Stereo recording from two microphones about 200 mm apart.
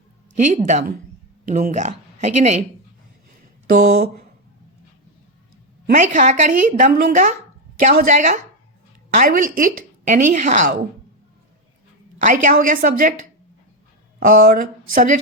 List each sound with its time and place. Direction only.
0.3 s a woman's voice: 35° right (ahead or behind)
3.8 s a sound: 55° right (ahead or behind)
5.8 s a woman's voice: 40° right (ahead or behind)
12.3 s a woman's voice: 40° right (ahead or behind)
14.3 s speech: 45° right (ahead or behind)